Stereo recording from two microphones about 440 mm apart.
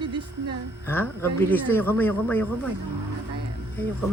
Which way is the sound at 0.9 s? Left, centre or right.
Centre.